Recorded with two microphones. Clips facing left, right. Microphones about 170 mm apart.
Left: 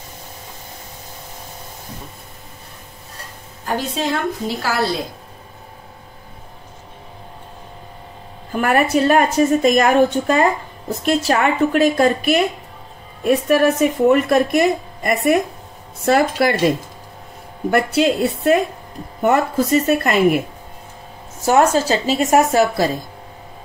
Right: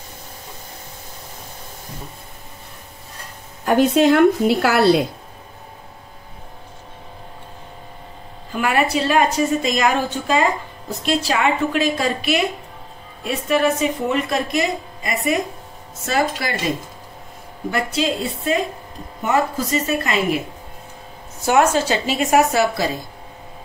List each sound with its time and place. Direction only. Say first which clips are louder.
3.6 s a woman's voice: right 8 dB; 65° right (ahead or behind)
8.5 s a woman's voice: left 3 dB; 50° left (ahead or behind)
21.5 s a woman's voice: left 2 dB; 40° left (ahead or behind)